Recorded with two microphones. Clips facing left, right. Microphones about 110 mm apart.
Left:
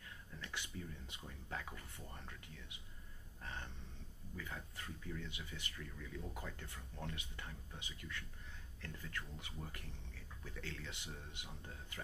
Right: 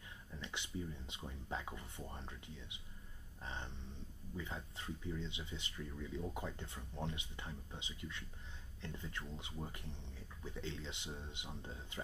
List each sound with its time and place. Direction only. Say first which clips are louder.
0.3 s speech: right 2 dB; 20° right (ahead or behind)